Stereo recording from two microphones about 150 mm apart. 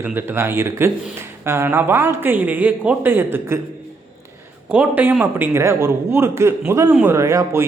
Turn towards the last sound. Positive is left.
turn(degrees=-20)  # may be behind; listen again after turning